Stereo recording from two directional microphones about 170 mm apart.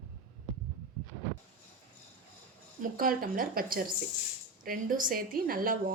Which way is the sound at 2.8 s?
55° right (ahead or behind).